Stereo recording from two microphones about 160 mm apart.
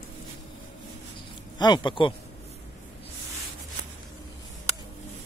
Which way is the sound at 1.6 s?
25° left (ahead or behind).